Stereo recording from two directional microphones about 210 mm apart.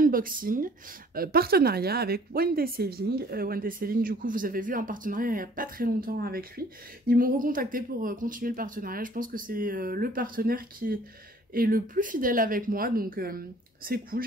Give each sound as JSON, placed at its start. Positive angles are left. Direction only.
{"t": 0.0, "sound": "speech", "side_deg": -40}